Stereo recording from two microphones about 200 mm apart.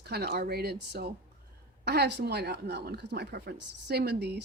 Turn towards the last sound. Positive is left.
turn(degrees=-55)  # may be behind; listen again after turning